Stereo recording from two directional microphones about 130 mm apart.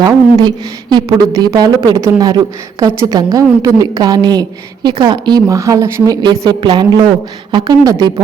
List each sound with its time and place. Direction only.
0.0 s a woman's voice: 30° right (ahead or behind)